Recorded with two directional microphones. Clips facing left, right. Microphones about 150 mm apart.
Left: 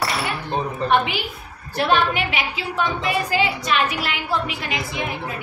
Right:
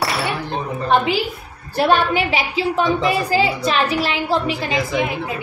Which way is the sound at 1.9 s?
35° right (ahead or behind).